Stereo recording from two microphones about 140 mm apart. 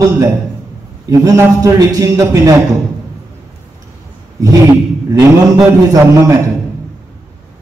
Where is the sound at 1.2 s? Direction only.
25° right (ahead or behind).